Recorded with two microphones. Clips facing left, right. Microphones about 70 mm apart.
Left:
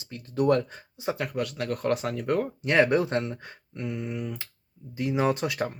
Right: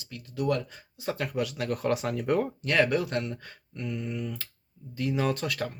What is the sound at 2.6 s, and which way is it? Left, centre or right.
Speech, left.